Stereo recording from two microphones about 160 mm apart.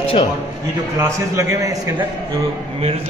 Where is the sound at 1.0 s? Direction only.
20° right (ahead or behind).